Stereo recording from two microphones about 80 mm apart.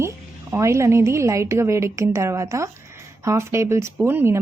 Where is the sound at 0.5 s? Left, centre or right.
Right.